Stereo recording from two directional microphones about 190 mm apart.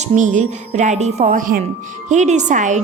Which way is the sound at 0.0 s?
40° right (ahead or behind).